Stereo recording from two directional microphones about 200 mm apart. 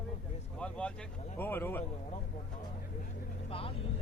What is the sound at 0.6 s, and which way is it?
Speech, 5° left (ahead or behind).